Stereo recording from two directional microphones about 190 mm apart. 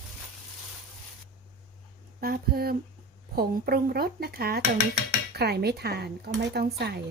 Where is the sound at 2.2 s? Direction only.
55° right (ahead or behind).